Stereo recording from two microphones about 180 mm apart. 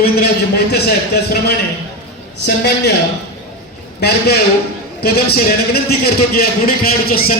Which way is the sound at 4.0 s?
60° left (ahead or behind).